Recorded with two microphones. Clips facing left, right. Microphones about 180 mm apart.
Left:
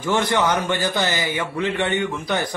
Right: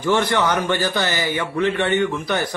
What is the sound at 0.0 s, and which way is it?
Speech, 15° left (ahead or behind).